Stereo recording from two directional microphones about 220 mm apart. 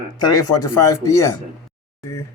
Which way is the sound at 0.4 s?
90° left.